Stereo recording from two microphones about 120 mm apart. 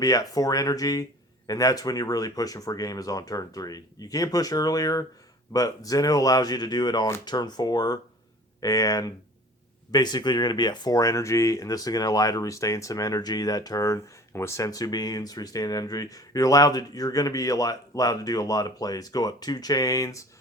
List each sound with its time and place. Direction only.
0.0 s speech: 30° left (ahead or behind)